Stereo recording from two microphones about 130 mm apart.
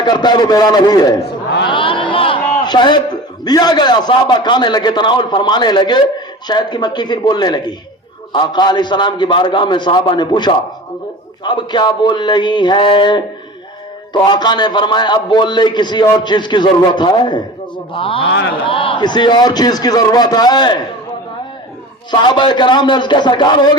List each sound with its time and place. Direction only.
0.0 s a man's voice: 35° left (ahead or behind)
1.6 s a sound: 40° left (ahead or behind)
2.6 s a man's voice: 35° left (ahead or behind)
22.1 s a man's voice: 35° left (ahead or behind)